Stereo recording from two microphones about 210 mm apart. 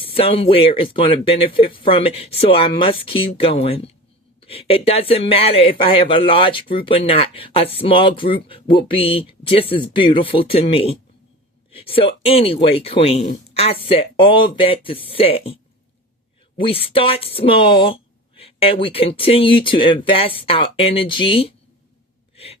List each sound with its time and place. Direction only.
0.0 s speech: 25° left (ahead or behind)
16.6 s speech: 25° left (ahead or behind)